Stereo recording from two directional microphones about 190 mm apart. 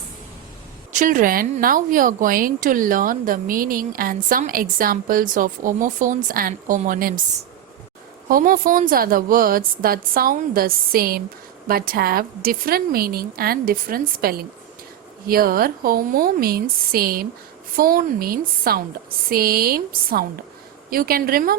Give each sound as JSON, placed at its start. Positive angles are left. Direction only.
{"t": 0.9, "sound": "a woman's voice", "side_deg": -45}
{"t": 8.3, "sound": "a woman's voice", "side_deg": -45}